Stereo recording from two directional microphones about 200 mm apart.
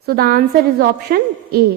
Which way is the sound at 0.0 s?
50° right (ahead or behind).